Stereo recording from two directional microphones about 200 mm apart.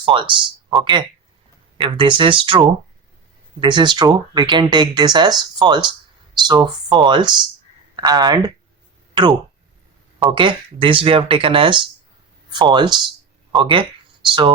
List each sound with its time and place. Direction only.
0.0 s speech: 25° right (ahead or behind)
10.3 s speech: 25° right (ahead or behind)